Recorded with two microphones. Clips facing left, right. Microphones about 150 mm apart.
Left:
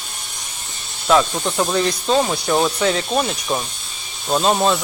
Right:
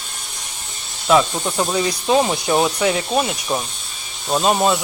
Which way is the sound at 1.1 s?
5° right (ahead or behind).